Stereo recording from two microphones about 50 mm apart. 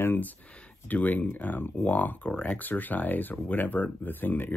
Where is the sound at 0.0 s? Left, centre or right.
Left.